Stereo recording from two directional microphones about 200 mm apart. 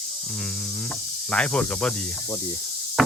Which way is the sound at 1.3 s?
5° left (ahead or behind).